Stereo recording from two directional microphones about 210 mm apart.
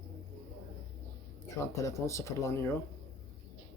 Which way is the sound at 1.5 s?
15° left (ahead or behind).